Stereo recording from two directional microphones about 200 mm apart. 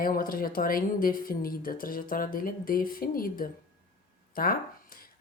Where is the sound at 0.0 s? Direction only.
45° left (ahead or behind).